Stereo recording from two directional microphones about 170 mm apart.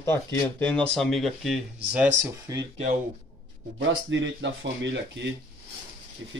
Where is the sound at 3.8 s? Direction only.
90° right.